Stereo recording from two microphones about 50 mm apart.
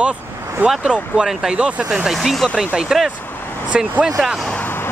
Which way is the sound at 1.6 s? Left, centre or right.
Right.